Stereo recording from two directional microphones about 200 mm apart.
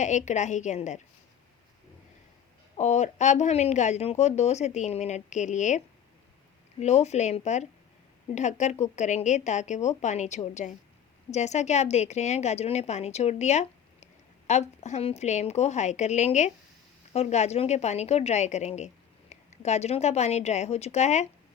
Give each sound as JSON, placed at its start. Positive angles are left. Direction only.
{"t": 0.0, "sound": "a woman's voice", "side_deg": 35}
{"t": 2.7, "sound": "a woman's voice", "side_deg": 35}